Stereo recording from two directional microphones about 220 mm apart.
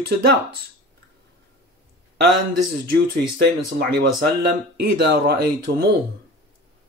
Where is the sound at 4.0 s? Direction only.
45° right (ahead or behind).